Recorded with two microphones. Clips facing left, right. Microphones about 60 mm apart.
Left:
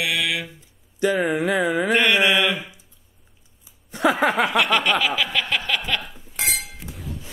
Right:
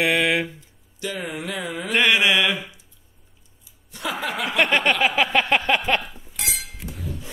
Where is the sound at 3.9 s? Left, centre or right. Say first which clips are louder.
Left 9 dB; left.